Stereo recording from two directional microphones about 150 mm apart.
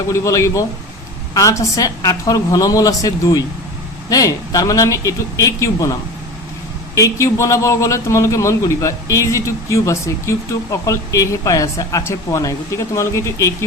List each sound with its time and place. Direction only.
0.1 s a man's voice: 20° left (ahead or behind)